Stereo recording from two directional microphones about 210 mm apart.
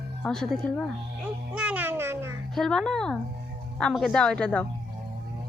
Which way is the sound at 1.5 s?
5° right (ahead or behind).